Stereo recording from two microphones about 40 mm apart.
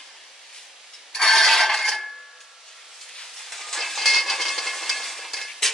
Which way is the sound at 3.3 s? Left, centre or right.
Centre.